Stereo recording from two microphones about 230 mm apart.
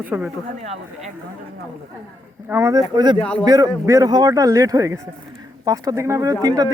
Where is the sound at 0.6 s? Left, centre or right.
Right.